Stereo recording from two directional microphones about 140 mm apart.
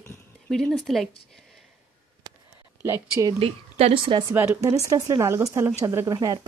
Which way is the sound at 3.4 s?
45° right (ahead or behind).